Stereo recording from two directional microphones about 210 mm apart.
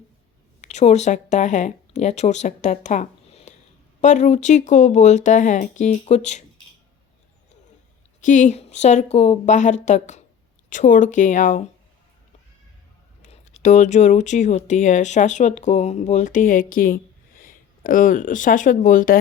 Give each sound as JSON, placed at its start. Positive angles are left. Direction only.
{"t": 0.6, "sound": "speech", "side_deg": 35}
{"t": 8.2, "sound": "speech", "side_deg": 35}
{"t": 13.2, "sound": "speech", "side_deg": 35}